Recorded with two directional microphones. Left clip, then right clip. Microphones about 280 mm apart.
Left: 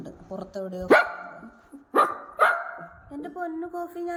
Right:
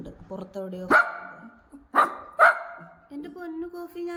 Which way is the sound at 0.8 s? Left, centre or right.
Centre.